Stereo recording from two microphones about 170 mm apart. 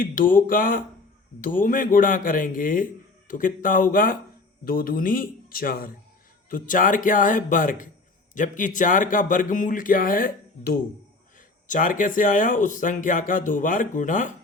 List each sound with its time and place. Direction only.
0.0 s a man's voice: 55° left (ahead or behind)